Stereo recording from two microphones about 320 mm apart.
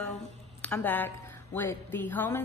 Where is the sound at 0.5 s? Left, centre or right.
Centre.